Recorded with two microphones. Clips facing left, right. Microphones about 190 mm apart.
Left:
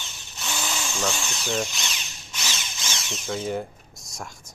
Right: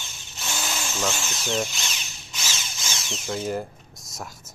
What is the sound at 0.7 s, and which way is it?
Drill, 5° right (ahead or behind).